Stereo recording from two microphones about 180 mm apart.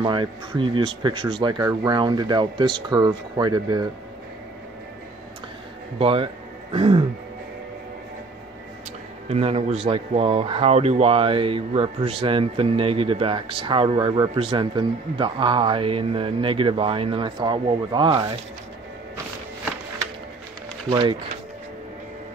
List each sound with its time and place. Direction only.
0.0 s speech: 25° right (ahead or behind)
5.9 s speech: 30° right (ahead or behind)
9.3 s speech: 35° right (ahead or behind)
20.9 s speech: 25° right (ahead or behind)